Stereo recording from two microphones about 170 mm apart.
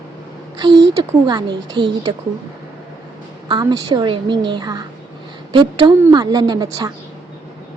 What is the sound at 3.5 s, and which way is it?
Speech, 25° right (ahead or behind).